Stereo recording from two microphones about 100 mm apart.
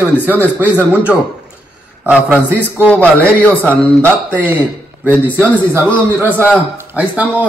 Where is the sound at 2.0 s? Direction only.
15° right (ahead or behind).